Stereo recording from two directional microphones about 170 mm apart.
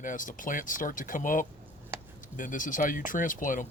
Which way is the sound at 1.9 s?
15° right (ahead or behind).